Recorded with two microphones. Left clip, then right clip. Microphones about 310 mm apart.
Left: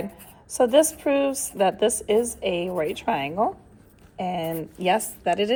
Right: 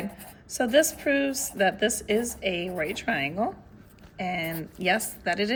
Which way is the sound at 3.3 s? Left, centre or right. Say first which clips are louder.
Left 5 dB; left.